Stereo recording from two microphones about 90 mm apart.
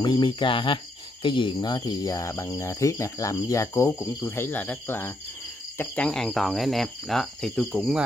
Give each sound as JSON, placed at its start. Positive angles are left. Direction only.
{"t": 0.0, "sound": "speech", "side_deg": 55}
{"t": 1.7, "sound": "cricket", "side_deg": 45}
{"t": 6.0, "sound": "cricket", "side_deg": 5}